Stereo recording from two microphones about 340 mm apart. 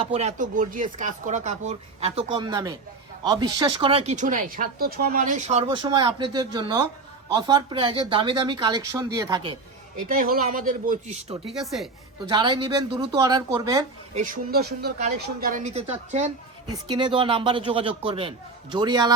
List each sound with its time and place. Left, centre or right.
0.1 s speech: centre
10.2 s speech: right
11.6 s a woman's voice: centre
12.3 s speech: centre
14.2 s speech: right